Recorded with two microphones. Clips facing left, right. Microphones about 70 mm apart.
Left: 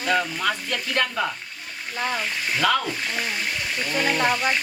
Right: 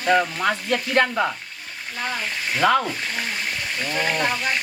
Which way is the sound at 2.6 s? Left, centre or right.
Right.